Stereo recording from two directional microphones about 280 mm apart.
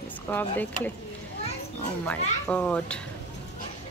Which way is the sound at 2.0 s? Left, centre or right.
Centre.